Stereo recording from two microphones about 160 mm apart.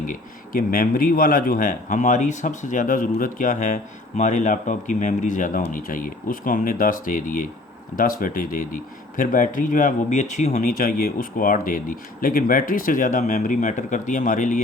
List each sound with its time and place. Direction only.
0.1 s speech: 60° left (ahead or behind)